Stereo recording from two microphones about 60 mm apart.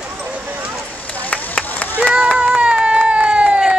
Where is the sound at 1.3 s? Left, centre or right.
Left.